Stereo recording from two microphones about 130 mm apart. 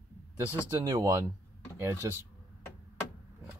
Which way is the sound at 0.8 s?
25° right (ahead or behind).